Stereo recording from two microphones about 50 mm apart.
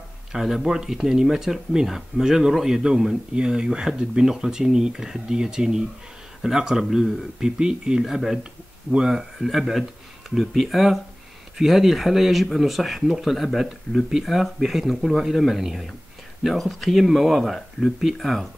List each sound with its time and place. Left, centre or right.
0.3 s speech: centre
8.0 s speech: centre
17.6 s speech: centre
18.2 s speech: centre